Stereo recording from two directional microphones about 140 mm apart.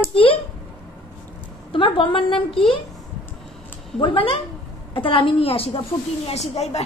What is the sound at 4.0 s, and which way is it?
A woman's voice, 40° left (ahead or behind).